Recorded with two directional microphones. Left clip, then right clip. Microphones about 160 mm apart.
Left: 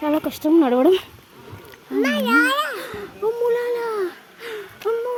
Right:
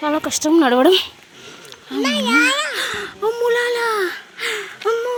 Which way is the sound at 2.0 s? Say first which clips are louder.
Right 2 dB; 55° left (ahead or behind).